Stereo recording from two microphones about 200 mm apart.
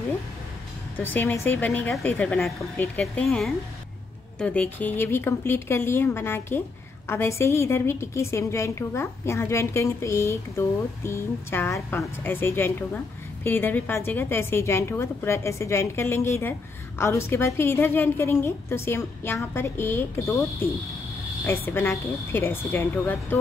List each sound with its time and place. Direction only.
0.9 s a woman's voice: 10° left (ahead or behind)
21.6 s a woman's voice: 10° left (ahead or behind)